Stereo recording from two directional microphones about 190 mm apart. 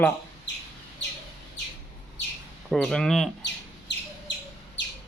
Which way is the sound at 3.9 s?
65° left (ahead or behind).